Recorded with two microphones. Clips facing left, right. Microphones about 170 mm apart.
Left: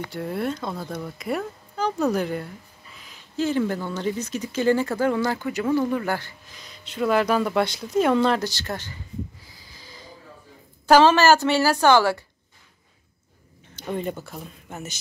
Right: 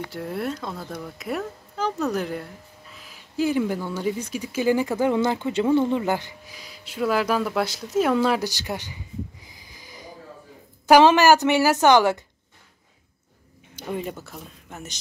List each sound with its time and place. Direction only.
0.1 s a woman's voice: centre (ahead or behind); by 12.2 s 15° right (ahead or behind)
13.7 s speech: 5° right (ahead or behind)